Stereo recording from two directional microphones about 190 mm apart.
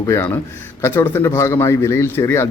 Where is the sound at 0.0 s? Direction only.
15° left (ahead or behind).